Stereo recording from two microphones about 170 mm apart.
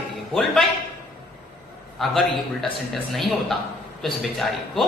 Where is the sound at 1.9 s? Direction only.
Centre (ahead or behind).